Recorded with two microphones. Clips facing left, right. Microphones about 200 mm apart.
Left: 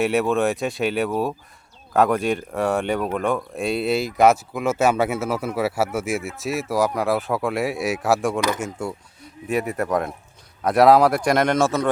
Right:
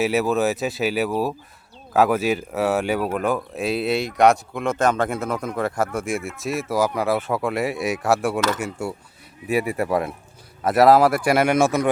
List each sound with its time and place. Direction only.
0.0 s speech: centre (ahead or behind)